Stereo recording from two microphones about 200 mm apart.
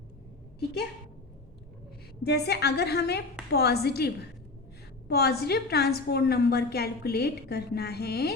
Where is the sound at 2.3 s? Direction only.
55° left (ahead or behind).